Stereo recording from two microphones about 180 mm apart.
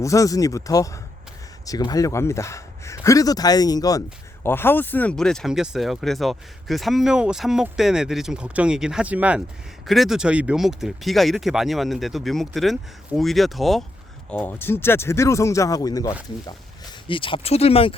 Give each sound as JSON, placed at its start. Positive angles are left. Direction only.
{"t": 0.0, "sound": "speech", "side_deg": 20}